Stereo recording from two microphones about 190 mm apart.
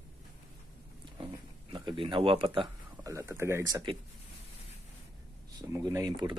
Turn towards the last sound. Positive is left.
turn(degrees=-25)  # may be behind; listen again after turning